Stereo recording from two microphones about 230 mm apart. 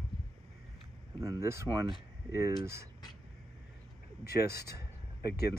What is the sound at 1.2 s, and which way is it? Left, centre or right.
Speech, centre.